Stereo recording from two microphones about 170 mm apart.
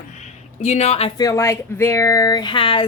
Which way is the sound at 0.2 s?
40° left (ahead or behind).